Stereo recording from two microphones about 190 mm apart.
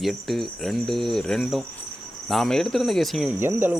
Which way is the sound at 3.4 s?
10° right (ahead or behind).